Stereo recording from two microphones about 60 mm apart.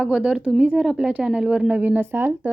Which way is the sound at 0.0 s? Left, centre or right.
Centre.